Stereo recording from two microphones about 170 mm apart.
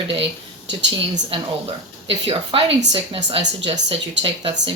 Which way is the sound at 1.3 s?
30° right (ahead or behind).